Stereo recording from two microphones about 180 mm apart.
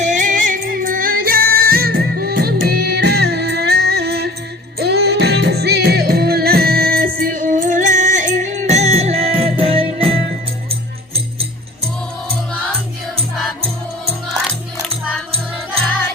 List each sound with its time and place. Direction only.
0.0 s music: 45° right (ahead or behind)